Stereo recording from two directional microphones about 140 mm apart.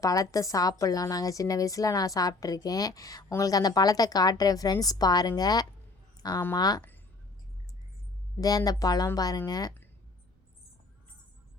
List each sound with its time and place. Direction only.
0.0 s a woman's voice: 25° left (ahead or behind)
8.4 s a woman's voice: 25° left (ahead or behind)